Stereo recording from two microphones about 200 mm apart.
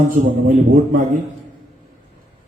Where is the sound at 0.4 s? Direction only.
40° right (ahead or behind).